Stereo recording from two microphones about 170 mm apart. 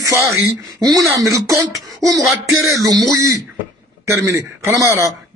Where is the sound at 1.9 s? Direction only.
20° right (ahead or behind).